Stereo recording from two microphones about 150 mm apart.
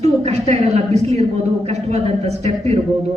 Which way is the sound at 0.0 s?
45° right (ahead or behind).